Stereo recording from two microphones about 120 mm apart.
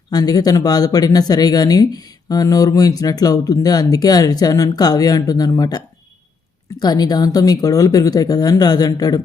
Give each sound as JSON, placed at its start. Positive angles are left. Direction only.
{"t": 0.1, "sound": "speech", "side_deg": 35}